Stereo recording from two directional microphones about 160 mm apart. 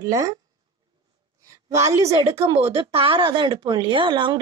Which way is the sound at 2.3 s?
35° right (ahead or behind).